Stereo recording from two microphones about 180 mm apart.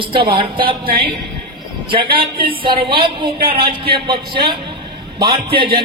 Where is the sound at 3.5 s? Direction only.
60° right (ahead or behind).